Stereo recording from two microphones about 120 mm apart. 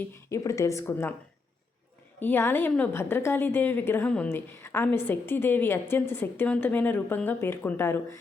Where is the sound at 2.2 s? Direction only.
15° left (ahead or behind).